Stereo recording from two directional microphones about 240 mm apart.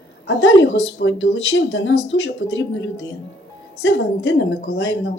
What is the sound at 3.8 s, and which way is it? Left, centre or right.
Speech, left.